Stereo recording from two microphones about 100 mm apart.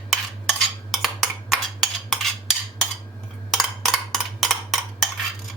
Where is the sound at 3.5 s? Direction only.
Centre (ahead or behind).